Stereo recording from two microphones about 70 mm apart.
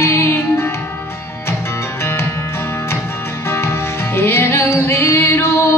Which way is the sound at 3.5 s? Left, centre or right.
Left.